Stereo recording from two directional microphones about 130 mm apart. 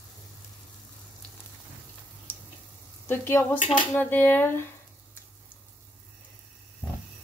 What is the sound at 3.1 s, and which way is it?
Speech, 15° left (ahead or behind).